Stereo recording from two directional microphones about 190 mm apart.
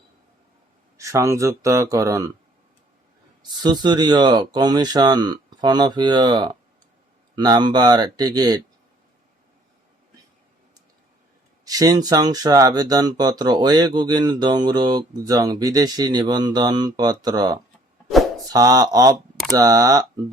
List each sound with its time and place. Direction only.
0.9 s speech: 15° right (ahead or behind)
3.6 s speech: 20° right (ahead or behind)
11.6 s speech: 20° right (ahead or behind)